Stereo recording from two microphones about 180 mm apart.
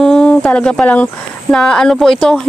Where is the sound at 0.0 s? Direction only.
5° left (ahead or behind).